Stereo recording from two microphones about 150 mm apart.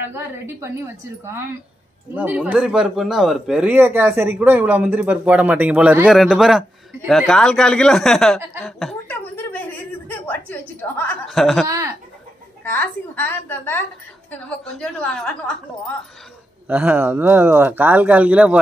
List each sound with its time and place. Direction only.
0.0 s speech: 15° right (ahead or behind); by 8.9 s centre (ahead or behind)
9.0 s a sound: 10° left (ahead or behind)
10.8 s a woman's voice: 15° left (ahead or behind)
11.2 s speech: centre (ahead or behind)
11.6 s speech: 20° right (ahead or behind)
12.6 s a woman's voice: 15° left (ahead or behind)
16.6 s speech: 10° right (ahead or behind)